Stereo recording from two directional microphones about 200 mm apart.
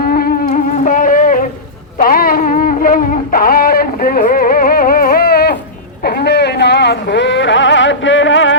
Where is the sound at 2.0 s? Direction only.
45° left (ahead or behind).